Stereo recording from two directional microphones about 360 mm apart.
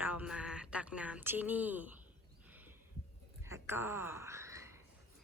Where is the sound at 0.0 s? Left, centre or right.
Centre.